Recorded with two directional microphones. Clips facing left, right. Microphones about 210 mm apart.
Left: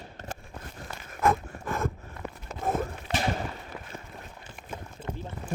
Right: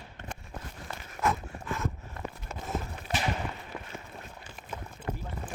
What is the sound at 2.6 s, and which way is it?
Run, 55° left (ahead or behind).